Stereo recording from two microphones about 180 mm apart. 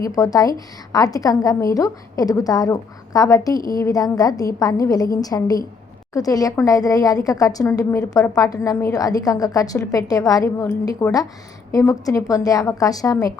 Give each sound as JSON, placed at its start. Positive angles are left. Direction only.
{"t": 0.0, "sound": "a woman's voice", "side_deg": 20}